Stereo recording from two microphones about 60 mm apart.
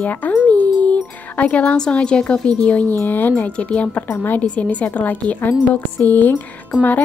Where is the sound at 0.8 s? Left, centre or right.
Left.